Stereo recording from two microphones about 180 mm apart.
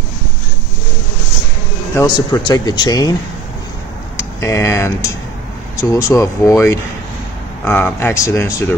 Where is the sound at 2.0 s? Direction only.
20° left (ahead or behind).